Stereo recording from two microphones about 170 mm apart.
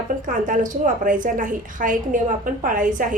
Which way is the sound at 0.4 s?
50° right (ahead or behind).